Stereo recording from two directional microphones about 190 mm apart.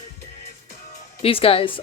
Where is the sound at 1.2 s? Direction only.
30° left (ahead or behind).